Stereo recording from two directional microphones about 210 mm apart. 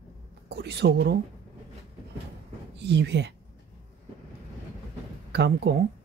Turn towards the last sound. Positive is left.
turn(degrees=-50)  # may be behind; listen again after turning